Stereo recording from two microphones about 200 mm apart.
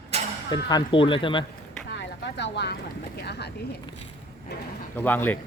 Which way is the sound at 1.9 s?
60° left (ahead or behind).